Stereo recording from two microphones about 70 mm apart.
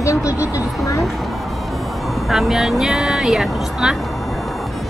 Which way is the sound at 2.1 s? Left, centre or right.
Centre.